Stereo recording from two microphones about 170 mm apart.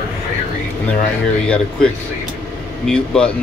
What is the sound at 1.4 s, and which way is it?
Speech, 5° left (ahead or behind).